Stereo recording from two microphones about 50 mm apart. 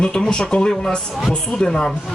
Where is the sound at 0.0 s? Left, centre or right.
Centre.